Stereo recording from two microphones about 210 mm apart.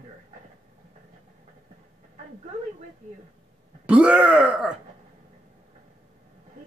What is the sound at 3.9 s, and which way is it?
Speech, 5° right (ahead or behind).